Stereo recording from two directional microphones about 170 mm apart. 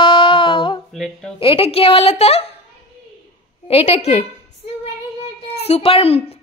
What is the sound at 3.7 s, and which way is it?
Speech, 40° left (ahead or behind).